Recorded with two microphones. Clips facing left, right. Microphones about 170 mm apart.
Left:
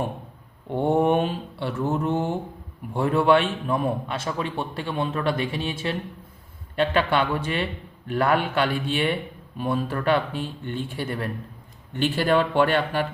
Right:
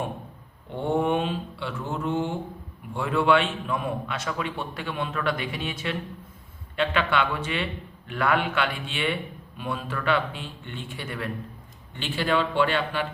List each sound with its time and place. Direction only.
1.0 s a man's voice: 45° left (ahead or behind)